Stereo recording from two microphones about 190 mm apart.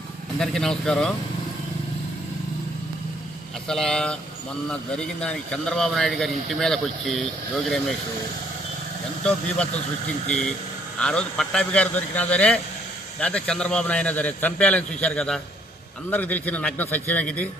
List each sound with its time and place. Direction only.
0.3 s a man's voice: 5° left (ahead or behind)
3.7 s a man's voice: 5° left (ahead or behind)
10.2 s a man's voice: 5° left (ahead or behind)